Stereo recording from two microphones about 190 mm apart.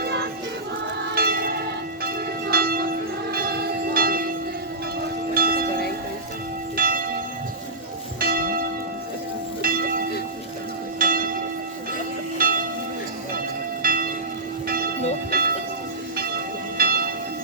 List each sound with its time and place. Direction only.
0.0 s music: 60° right (ahead or behind)
1.1 s church bell: 55° right (ahead or behind)
5.3 s church bell: 50° right (ahead or behind)
6.7 s church bell: 45° right (ahead or behind)
8.2 s church bell: 50° right (ahead or behind)
9.6 s music: 50° right (ahead or behind)
11.0 s church bell: 50° right (ahead or behind)
12.4 s church bell: 50° right (ahead or behind)
13.8 s church bell: 50° right (ahead or behind)
15.3 s music: 50° right (ahead or behind)
16.1 s church bell: 55° right (ahead or behind)